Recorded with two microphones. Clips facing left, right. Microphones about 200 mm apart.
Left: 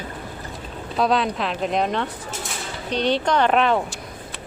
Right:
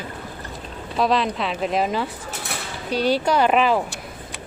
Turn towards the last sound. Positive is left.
turn(degrees=-5)  # may be behind; listen again after turning